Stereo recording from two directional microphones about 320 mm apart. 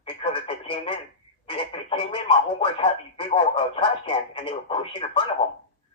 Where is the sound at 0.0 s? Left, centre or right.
Centre.